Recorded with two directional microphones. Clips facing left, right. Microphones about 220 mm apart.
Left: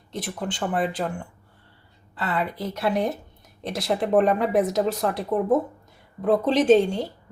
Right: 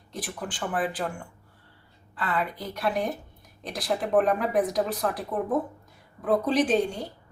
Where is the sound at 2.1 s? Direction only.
25° left (ahead or behind).